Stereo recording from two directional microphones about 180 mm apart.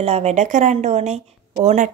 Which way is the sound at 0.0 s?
35° right (ahead or behind).